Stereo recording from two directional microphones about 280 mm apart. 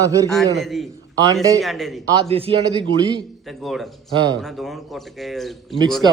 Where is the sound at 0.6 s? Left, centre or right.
Centre.